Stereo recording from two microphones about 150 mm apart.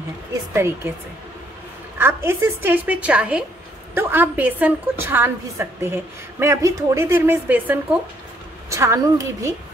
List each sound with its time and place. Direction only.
0.3 s a woman's voice: 15° right (ahead or behind)
2.0 s a woman's voice: 15° right (ahead or behind)